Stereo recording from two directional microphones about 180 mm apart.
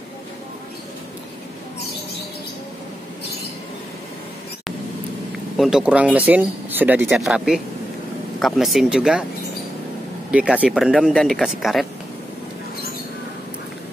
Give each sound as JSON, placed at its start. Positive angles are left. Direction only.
{"t": 5.6, "sound": "speech", "side_deg": -5}
{"t": 10.3, "sound": "speech", "side_deg": -5}